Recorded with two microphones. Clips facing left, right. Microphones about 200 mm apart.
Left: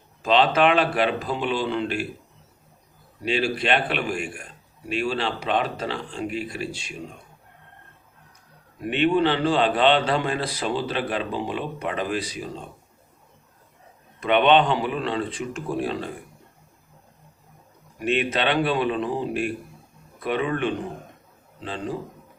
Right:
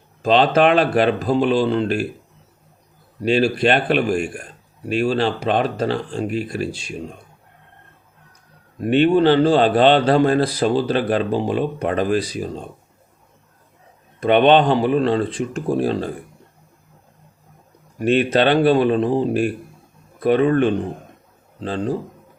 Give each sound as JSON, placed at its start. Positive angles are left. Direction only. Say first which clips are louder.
{"t": 0.2, "sound": "a man's voice", "louder": "right 4 dB", "side_deg": -40}
{"t": 3.2, "sound": "a man's voice", "louder": "right 7 dB", "side_deg": -40}
{"t": 8.8, "sound": "a man's voice", "louder": "right 6 dB", "side_deg": -40}
{"t": 14.2, "sound": "a man's voice", "louder": "right 5 dB", "side_deg": -40}
{"t": 18.0, "sound": "a man's voice", "louder": "right 7 dB", "side_deg": -40}